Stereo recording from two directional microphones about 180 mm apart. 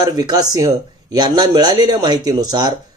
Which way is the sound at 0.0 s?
20° right (ahead or behind).